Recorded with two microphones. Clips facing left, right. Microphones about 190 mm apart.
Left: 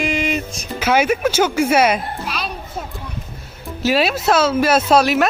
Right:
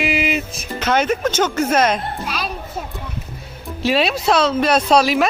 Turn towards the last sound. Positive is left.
turn(degrees=0)  # may be behind; listen again after turning